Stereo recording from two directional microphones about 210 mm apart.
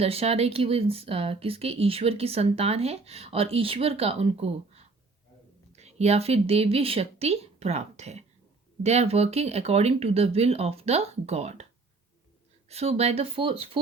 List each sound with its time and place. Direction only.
0.0 s speech: 30° right (ahead or behind)
12.6 s speech: 30° right (ahead or behind)